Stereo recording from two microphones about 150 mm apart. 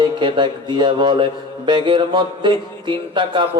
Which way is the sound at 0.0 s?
30° right (ahead or behind).